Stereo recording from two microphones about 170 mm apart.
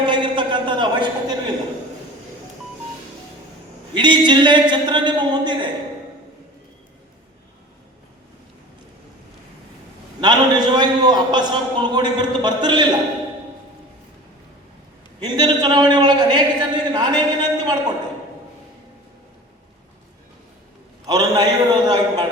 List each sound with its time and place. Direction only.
0.1 s a sound: 30° right (ahead or behind)
3.9 s a man's voice: 25° right (ahead or behind)
10.2 s a man's voice: 25° right (ahead or behind)
15.2 s a man's voice: 25° right (ahead or behind)
21.1 s a man's voice: 25° right (ahead or behind)